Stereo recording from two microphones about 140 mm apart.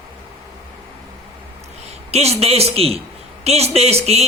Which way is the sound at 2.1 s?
50° right (ahead or behind).